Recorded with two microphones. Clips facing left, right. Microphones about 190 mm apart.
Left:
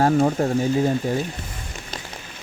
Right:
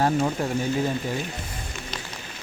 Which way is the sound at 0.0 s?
45° left (ahead or behind).